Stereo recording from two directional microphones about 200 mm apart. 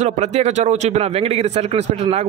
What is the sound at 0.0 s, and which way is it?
A man's voice, 35° right (ahead or behind).